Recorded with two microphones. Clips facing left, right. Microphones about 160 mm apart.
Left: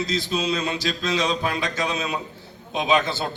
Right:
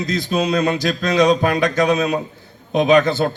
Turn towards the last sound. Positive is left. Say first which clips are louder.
# right 8 dB
turn(degrees=-50)  # may be behind; listen again after turning